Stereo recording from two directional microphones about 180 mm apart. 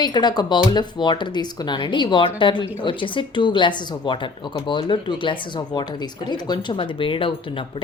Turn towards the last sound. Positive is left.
turn(degrees=30)  # may be behind; listen again after turning